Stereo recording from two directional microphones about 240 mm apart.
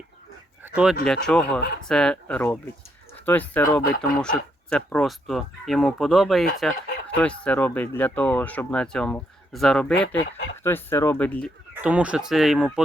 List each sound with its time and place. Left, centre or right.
0.6 s a sound: centre
1.0 s speech: centre
3.8 s speech: left
4.2 s speech: centre
11.7 s speech: centre